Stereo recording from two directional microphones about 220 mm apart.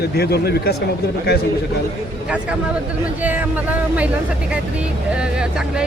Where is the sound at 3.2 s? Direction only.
5° right (ahead or behind).